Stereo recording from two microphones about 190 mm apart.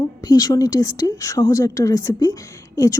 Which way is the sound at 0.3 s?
20° left (ahead or behind).